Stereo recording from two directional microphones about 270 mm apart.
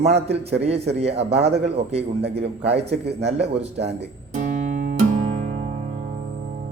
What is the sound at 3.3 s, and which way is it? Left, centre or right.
Speech, right.